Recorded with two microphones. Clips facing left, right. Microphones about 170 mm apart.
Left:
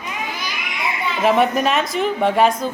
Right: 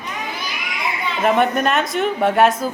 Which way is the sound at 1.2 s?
Centre (ahead or behind).